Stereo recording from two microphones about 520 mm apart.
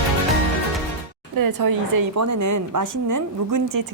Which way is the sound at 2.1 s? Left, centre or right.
Right.